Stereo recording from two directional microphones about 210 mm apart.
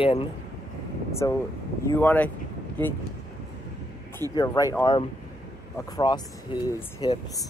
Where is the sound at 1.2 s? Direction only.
15° left (ahead or behind).